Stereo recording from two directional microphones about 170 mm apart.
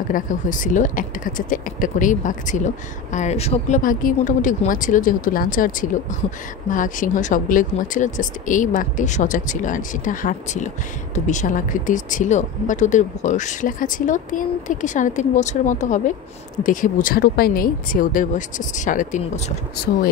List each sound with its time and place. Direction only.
0.1 s speech: 50° left (ahead or behind)